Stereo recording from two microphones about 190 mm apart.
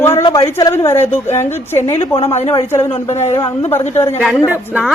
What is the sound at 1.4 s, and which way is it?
Speech, 15° left (ahead or behind).